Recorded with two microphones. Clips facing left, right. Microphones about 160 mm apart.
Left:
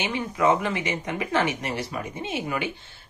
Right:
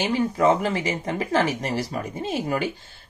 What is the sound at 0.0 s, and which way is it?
Speech, 35° right (ahead or behind).